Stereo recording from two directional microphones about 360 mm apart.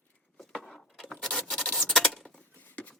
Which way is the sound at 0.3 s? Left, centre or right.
Centre.